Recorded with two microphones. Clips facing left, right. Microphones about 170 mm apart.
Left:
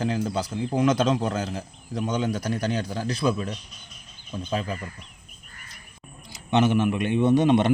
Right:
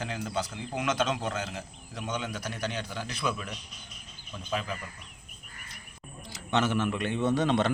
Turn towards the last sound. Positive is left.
turn(degrees=15)  # may be behind; listen again after turning